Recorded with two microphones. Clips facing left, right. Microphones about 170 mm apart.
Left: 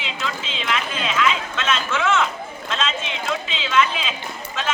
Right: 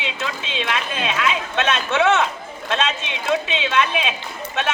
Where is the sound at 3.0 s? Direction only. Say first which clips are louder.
Right 4 dB; 20° right (ahead or behind).